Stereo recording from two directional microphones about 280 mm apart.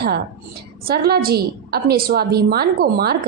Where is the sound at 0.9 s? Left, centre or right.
Right.